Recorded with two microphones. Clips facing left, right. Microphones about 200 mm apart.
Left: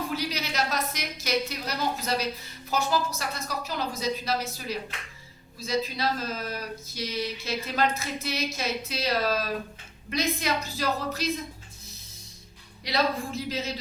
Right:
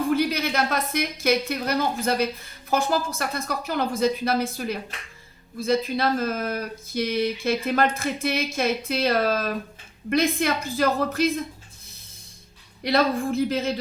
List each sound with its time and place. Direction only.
0.1 s a woman's voice: 55° right (ahead or behind)
12.8 s speech: 55° right (ahead or behind)